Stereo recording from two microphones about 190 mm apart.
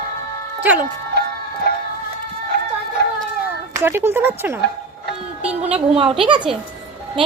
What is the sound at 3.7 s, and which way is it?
Speech, 10° right (ahead or behind).